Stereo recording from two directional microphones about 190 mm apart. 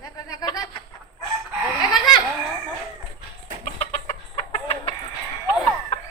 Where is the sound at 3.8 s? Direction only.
35° left (ahead or behind).